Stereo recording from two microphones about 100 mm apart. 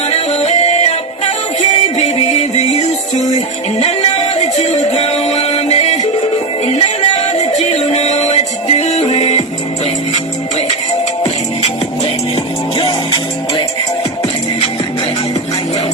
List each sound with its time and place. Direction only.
0.1 s music: 90° left
4.9 s music: 90° left
7.9 s music: 90° left
12.7 s music: 60° left (ahead or behind)